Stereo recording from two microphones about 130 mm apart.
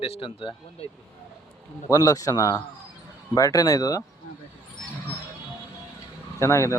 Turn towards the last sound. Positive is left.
turn(degrees=20)  # may be behind; listen again after turning